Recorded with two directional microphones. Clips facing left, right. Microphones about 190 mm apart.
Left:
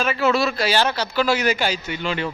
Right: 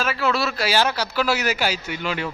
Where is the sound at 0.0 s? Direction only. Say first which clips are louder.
Left 3 dB; centre (ahead or behind).